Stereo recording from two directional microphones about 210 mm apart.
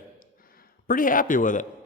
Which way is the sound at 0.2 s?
45° left (ahead or behind).